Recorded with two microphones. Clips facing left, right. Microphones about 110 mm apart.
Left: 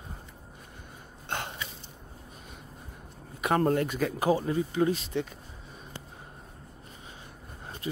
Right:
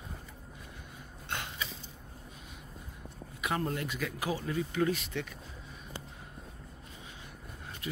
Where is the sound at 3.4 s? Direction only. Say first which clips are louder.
Left 8 dB; 50° left (ahead or behind); by 5.3 s 30° left (ahead or behind).